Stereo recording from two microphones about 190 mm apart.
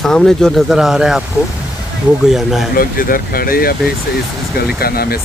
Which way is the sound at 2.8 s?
50° left (ahead or behind).